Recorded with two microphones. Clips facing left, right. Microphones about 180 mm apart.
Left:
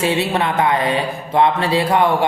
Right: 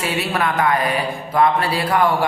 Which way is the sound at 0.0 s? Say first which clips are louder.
Left 3 dB; 25° left (ahead or behind).